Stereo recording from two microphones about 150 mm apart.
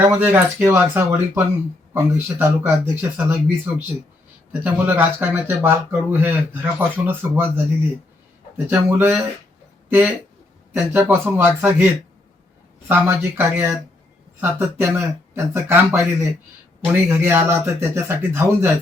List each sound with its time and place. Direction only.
0.1 s speech: 15° right (ahead or behind)
4.6 s speech: 15° right (ahead or behind)
12.9 s speech: 15° right (ahead or behind)